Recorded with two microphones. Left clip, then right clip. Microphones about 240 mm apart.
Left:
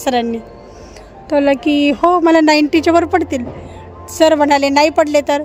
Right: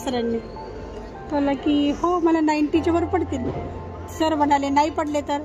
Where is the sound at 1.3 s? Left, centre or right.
Left.